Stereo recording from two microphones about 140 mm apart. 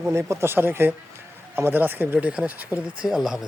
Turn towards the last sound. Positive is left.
turn(degrees=-5)  # may be behind; listen again after turning